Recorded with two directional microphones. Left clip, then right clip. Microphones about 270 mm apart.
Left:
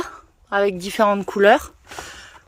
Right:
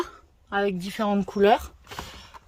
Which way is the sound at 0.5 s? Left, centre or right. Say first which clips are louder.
Left 7 dB; centre.